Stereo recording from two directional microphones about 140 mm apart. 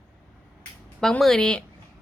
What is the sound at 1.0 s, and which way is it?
Speech, centre (ahead or behind).